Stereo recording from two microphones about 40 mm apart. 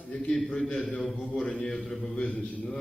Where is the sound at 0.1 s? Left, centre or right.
Left.